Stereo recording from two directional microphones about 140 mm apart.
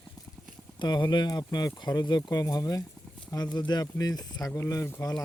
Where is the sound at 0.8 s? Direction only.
30° left (ahead or behind).